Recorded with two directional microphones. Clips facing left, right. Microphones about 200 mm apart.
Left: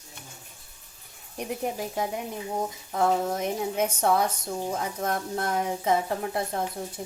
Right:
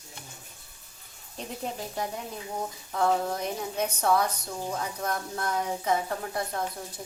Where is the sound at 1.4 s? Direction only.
15° left (ahead or behind).